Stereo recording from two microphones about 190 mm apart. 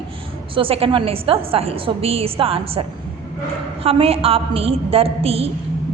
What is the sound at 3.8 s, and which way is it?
A woman's voice, 30° right (ahead or behind).